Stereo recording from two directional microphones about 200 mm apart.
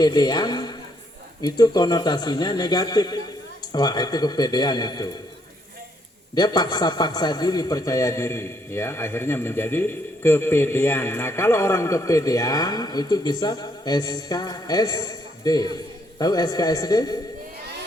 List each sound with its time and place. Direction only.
0.0 s a man's voice: 20° left (ahead or behind)
6.3 s a man's voice: 20° left (ahead or behind)